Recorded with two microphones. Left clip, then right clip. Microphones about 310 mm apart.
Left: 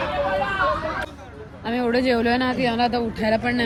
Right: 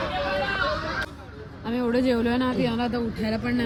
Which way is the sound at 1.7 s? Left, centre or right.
Centre.